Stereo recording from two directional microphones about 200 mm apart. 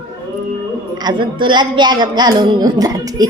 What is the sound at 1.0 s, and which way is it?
A woman's voice, 25° right (ahead or behind).